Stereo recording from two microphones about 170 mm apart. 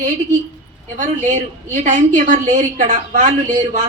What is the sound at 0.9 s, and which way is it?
A woman's voice, 45° right (ahead or behind).